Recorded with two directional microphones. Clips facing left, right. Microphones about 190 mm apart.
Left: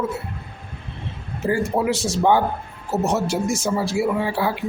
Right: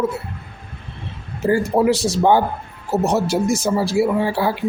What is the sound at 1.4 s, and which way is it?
Speech, 35° right (ahead or behind).